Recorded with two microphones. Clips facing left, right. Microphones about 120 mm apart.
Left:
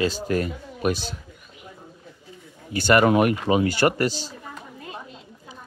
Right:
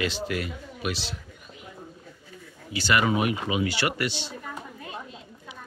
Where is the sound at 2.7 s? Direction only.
50° left (ahead or behind).